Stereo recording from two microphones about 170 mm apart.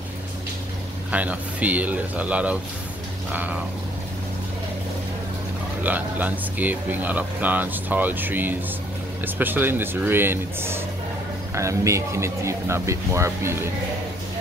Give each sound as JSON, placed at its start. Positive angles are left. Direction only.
{"t": 1.1, "sound": "speech", "side_deg": -10}
{"t": 5.9, "sound": "speech", "side_deg": -10}